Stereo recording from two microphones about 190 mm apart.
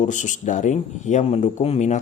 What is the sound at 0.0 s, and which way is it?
Speech, 40° left (ahead or behind).